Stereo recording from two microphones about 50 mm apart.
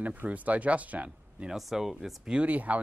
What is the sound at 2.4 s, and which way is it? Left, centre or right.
Speech, right.